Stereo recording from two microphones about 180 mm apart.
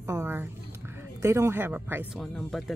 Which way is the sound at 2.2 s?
Centre (ahead or behind).